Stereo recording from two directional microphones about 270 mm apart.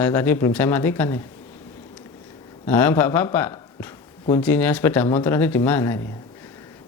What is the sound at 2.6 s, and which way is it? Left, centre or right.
Speech, centre.